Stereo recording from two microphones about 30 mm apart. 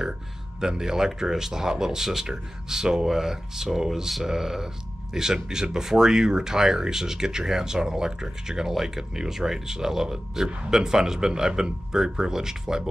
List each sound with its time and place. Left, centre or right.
0.6 s speech: centre